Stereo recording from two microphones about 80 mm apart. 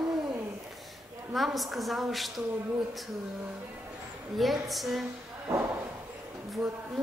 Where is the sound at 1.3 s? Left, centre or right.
Centre.